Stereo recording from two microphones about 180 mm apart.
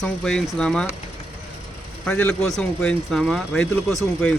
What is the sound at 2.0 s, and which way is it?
Speech, 10° left (ahead or behind).